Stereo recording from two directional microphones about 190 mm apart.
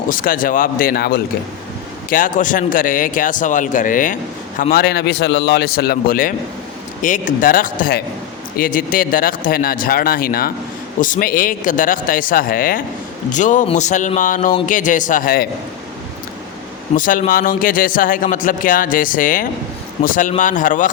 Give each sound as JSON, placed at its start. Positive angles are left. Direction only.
{"t": 0.1, "sound": "speech", "side_deg": 45}
{"t": 16.9, "sound": "speech", "side_deg": 45}